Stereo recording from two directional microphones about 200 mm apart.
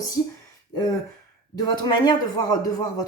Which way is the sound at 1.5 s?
20° left (ahead or behind).